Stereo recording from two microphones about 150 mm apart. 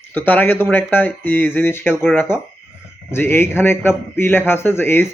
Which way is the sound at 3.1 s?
15° left (ahead or behind).